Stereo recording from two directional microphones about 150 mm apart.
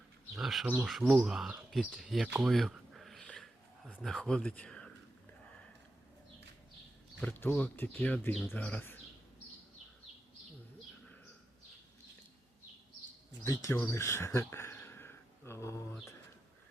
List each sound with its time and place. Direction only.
0.3 s speech: centre (ahead or behind)
7.2 s speech: 10° left (ahead or behind)
13.4 s speech: 20° left (ahead or behind)